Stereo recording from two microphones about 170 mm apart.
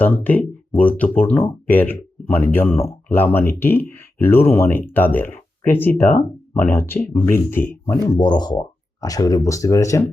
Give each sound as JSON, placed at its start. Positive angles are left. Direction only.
{"t": 0.0, "sound": "speech", "side_deg": 10}